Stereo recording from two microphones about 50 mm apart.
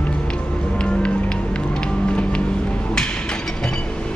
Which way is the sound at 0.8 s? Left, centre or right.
Left.